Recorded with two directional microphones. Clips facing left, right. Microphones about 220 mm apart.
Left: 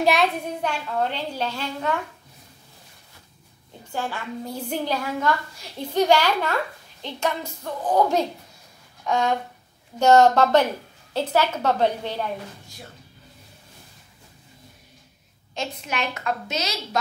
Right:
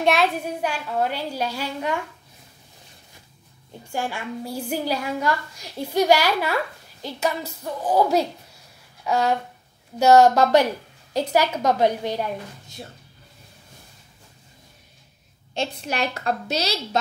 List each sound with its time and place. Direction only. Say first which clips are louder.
0.0 s a child's voice: even; centre (ahead or behind)
3.9 s a child's voice: right 1 dB; 10° right (ahead or behind)
15.5 s a woman's voice: right 3 dB; 35° right (ahead or behind)